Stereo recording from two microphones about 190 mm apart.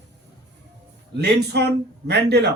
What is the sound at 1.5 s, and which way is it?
Speech, 60° right (ahead or behind).